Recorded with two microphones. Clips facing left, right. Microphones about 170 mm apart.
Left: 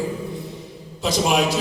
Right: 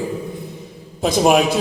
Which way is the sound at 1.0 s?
50° right (ahead or behind).